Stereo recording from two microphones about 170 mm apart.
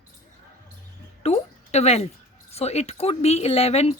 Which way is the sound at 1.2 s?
40° left (ahead or behind).